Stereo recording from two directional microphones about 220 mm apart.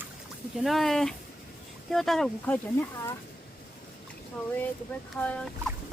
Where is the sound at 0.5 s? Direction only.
Centre (ahead or behind).